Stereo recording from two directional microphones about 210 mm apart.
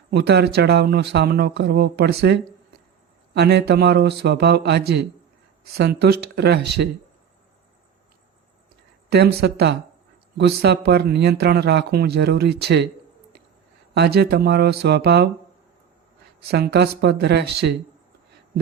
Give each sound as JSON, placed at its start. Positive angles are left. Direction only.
{"t": 0.1, "sound": "speech", "side_deg": -50}
{"t": 9.0, "sound": "speech", "side_deg": -50}
{"t": 13.9, "sound": "speech", "side_deg": -50}
{"t": 16.5, "sound": "speech", "side_deg": -50}